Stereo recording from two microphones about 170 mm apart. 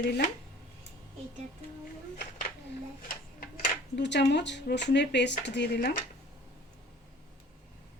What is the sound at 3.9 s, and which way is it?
Speech, 90° left.